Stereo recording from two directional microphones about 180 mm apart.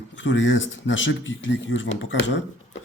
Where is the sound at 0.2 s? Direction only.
90° left.